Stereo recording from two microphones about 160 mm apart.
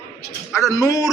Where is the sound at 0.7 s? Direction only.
20° left (ahead or behind).